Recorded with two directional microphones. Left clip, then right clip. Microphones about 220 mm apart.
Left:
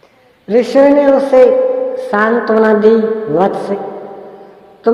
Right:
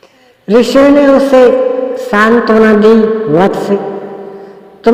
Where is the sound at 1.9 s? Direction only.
40° right (ahead or behind).